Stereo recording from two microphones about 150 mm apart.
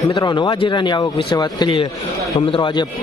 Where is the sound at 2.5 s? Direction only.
30° left (ahead or behind).